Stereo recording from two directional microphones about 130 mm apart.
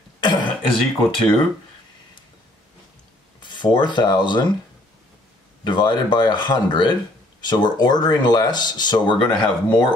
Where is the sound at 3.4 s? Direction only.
35° left (ahead or behind).